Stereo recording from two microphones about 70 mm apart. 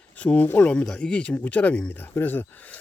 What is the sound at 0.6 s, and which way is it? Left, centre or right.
Speech, centre.